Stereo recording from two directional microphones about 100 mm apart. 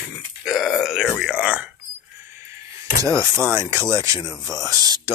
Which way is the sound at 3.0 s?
30° right (ahead or behind).